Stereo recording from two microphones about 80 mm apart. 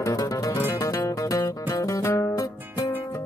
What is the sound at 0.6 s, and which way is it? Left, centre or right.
Music, left.